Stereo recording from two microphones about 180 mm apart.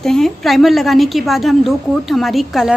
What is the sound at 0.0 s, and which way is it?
A woman's voice, centre (ahead or behind).